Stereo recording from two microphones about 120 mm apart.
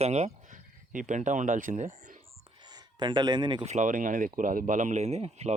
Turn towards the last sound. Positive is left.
turn(degrees=-65)  # may be behind; listen again after turning